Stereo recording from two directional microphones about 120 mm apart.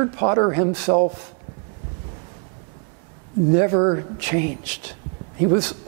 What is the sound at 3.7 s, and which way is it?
Speech, 20° right (ahead or behind).